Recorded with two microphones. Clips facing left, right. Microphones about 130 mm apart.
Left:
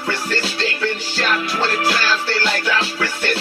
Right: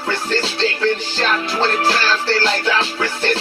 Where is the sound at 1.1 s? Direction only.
30° right (ahead or behind).